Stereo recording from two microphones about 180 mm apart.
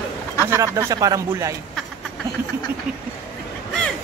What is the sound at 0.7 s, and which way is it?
Speech, 20° right (ahead or behind).